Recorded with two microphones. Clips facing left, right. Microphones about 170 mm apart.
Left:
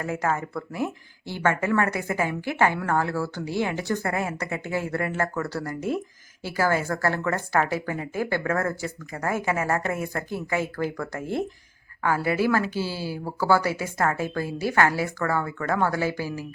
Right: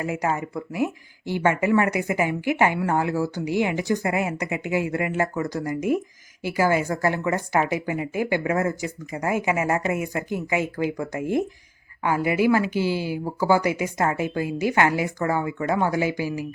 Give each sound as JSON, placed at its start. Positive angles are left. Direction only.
{"t": 0.0, "sound": "speech", "side_deg": -15}